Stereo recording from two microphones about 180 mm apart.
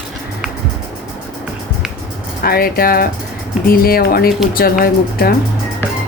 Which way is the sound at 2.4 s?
55° left (ahead or behind).